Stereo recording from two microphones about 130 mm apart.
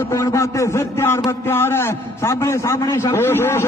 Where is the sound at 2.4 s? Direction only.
20° left (ahead or behind).